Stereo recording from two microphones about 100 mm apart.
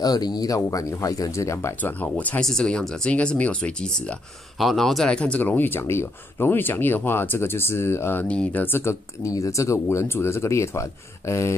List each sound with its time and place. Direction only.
0.0 s speech: 40° left (ahead or behind)
1.8 s speech: 15° left (ahead or behind)